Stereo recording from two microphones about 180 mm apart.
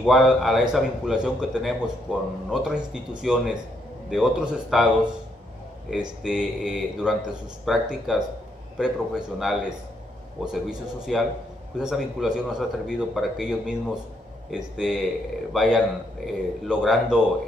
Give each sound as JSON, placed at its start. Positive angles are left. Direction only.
{"t": 0.0, "sound": "a man's voice", "side_deg": 0}